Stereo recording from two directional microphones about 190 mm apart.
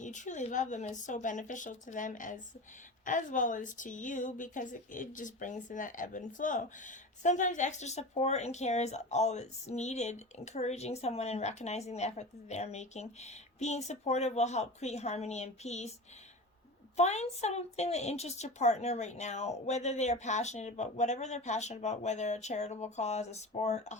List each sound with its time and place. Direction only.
0.0 s a woman's voice: 40° left (ahead or behind)
17.0 s a woman's voice: 35° left (ahead or behind)